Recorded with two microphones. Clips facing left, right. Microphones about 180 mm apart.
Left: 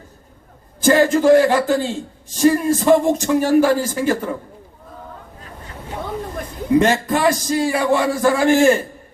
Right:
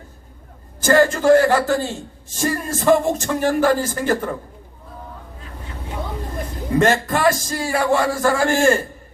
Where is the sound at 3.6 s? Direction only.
10° left (ahead or behind).